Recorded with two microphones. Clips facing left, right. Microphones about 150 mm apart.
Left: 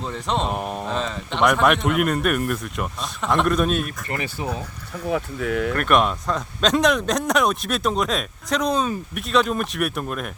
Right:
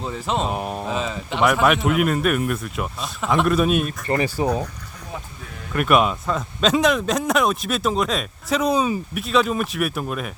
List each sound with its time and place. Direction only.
0.0 s speech: 5° right (ahead or behind)
3.8 s speech: 25° right (ahead or behind)
5.0 s speech: 90° left
5.7 s speech: 5° right (ahead or behind)